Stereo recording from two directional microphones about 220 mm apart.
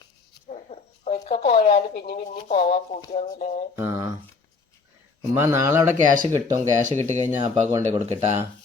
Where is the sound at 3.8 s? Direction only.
15° right (ahead or behind).